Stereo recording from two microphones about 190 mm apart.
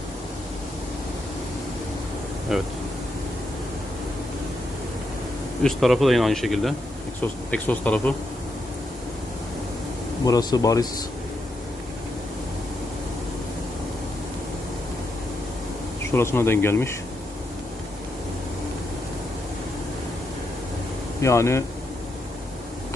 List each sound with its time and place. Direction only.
2.5 s speech: centre (ahead or behind)
5.6 s speech: centre (ahead or behind)
10.2 s speech: 20° left (ahead or behind)
16.1 s speech: 15° left (ahead or behind)
21.2 s speech: 15° left (ahead or behind)